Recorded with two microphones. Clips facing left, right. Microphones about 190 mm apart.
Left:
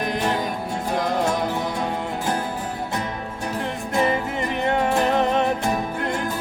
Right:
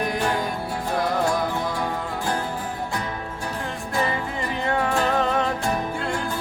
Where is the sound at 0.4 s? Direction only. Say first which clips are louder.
Left 1 dB; 20° left (ahead or behind).